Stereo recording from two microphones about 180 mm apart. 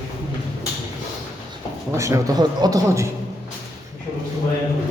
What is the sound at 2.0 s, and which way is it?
A man's voice, 15° right (ahead or behind).